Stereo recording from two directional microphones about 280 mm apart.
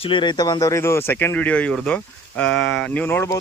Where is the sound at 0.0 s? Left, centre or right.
Centre.